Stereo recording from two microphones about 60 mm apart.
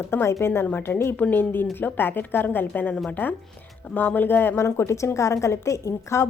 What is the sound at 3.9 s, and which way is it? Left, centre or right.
Speech, left.